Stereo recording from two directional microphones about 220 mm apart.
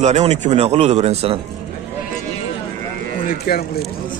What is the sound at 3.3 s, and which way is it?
Speech, 40° left (ahead or behind).